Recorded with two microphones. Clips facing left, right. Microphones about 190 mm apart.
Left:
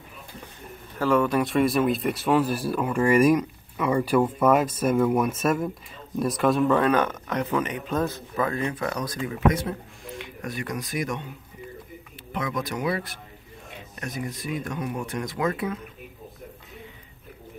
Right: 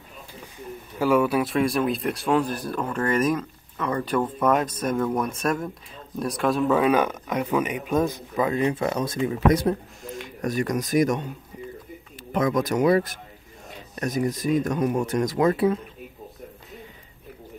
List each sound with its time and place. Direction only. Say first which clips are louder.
0.9 s speech: right 1 dB; 10° right (ahead or behind)
9.5 s speech: right 5 dB; 40° right (ahead or behind)
12.3 s speech: right 7 dB; 45° right (ahead or behind)